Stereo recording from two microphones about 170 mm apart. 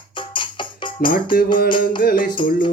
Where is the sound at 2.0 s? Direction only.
55° left (ahead or behind).